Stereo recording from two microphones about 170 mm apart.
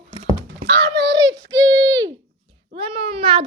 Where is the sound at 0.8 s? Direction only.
25° right (ahead or behind).